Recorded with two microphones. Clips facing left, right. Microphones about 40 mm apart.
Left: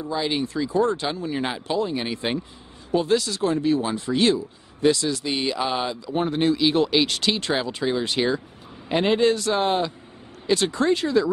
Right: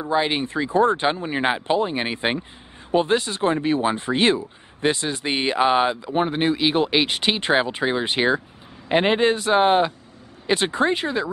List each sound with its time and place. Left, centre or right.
0.0 s speech: right